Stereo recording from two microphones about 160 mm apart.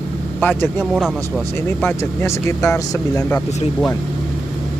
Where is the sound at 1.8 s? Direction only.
15° left (ahead or behind).